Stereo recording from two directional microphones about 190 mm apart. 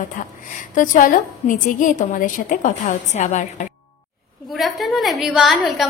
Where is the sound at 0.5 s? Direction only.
45° left (ahead or behind).